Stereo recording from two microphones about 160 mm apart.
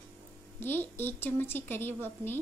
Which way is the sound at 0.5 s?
15° left (ahead or behind).